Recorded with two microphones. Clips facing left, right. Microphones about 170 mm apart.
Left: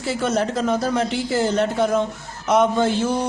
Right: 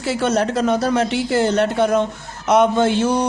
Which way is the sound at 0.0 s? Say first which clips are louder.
Right 3 dB; 75° right (ahead or behind).